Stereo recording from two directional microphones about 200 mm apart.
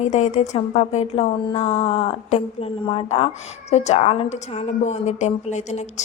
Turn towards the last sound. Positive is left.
turn(degrees=35)  # may be behind; listen again after turning